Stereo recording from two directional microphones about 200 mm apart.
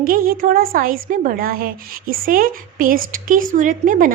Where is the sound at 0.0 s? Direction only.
45° right (ahead or behind).